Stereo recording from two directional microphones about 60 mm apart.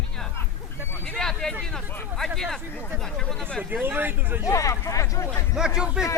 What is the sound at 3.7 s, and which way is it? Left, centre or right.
Speech, right.